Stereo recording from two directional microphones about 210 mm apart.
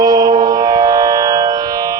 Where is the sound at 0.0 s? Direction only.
15° right (ahead or behind).